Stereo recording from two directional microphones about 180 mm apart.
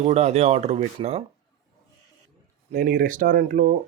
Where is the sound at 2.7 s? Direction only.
45° right (ahead or behind).